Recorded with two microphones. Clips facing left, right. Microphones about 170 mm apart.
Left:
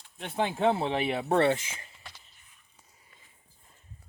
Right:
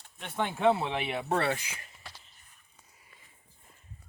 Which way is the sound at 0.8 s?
30° left (ahead or behind).